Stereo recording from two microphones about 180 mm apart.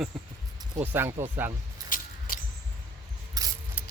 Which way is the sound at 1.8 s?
50° left (ahead or behind).